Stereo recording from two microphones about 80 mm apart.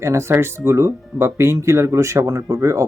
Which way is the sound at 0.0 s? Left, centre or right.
Right.